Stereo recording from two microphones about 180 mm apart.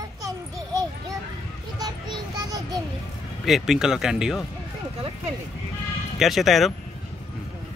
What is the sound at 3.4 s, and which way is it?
Speech, centre (ahead or behind).